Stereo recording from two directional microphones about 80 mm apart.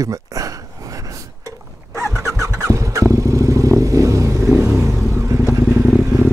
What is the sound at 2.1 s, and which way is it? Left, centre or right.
Vehicle, right.